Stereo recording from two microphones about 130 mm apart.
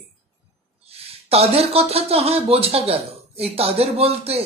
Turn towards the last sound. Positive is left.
turn(degrees=-50)  # may be behind; listen again after turning